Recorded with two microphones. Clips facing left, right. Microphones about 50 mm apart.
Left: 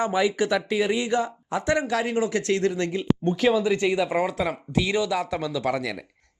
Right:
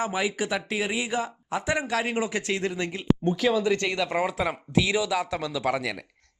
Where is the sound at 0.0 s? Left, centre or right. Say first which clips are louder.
Left 5 dB; centre.